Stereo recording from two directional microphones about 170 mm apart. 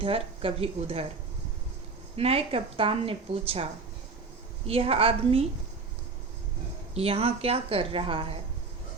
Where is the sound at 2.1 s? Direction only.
35° right (ahead or behind).